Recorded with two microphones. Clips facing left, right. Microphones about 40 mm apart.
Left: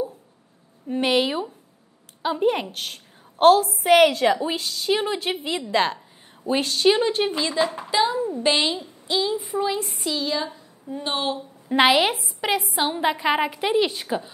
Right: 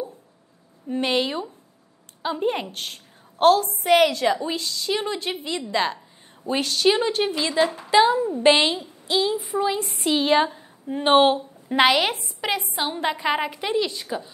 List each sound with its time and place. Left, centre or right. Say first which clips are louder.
0.8 s a woman's voice: left 2 dB; centre
4.3 s a woman's voice: left 1 dB; left
5.6 s a woman's voice: left 2 dB; centre
7.1 s a woman's voice: even; centre
7.9 s a woman's voice: right 7 dB; centre
10.1 s a woman's voice: right 8 dB; right
11.7 s a woman's voice: left 1 dB; centre
13.7 s a woman's voice: left 3 dB; left